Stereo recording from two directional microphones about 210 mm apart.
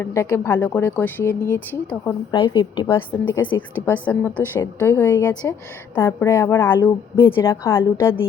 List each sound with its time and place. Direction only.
0.0 s speech: 15° left (ahead or behind)
2.3 s a woman's voice: 20° left (ahead or behind)
3.8 s speech: 5° left (ahead or behind)